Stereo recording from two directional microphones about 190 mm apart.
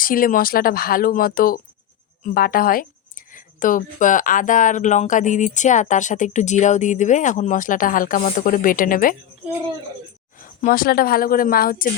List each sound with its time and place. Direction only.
0.0 s speech: 45° left (ahead or behind)
10.4 s speech: 45° left (ahead or behind)